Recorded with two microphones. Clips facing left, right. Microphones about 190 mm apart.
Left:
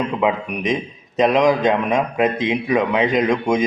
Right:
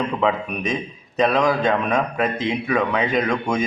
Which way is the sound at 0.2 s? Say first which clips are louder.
Left 2 dB; 15° left (ahead or behind).